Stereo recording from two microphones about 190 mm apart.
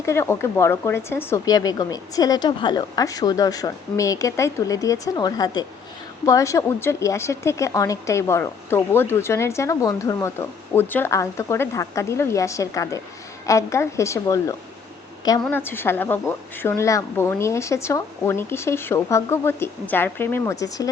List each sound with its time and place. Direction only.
0.0 s a woman's voice: 15° left (ahead or behind)